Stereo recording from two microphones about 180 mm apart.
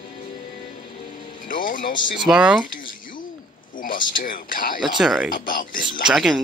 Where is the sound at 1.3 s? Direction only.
50° left (ahead or behind).